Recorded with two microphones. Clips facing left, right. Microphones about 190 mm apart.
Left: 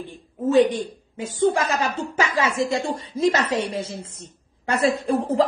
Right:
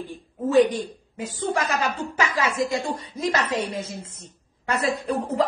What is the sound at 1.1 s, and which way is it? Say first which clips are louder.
Speech: left 6 dB; 25° left (ahead or behind).